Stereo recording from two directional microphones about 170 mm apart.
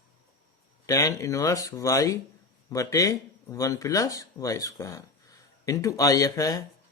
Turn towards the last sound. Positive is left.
turn(degrees=20)  # may be behind; listen again after turning